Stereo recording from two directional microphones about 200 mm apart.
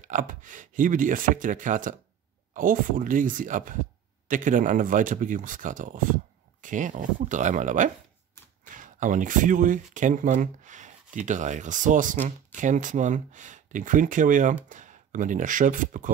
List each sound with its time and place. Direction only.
0.0 s speech: 40° right (ahead or behind)